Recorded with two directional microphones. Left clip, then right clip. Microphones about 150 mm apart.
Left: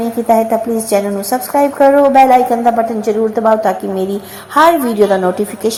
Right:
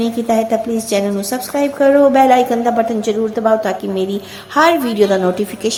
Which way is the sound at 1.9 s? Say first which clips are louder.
Left 1 dB; 25° right (ahead or behind).